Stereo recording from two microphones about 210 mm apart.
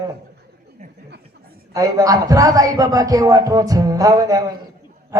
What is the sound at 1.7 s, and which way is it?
A woman's voice, 15° right (ahead or behind).